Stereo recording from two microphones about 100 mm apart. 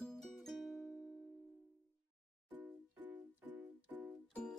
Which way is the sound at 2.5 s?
20° right (ahead or behind).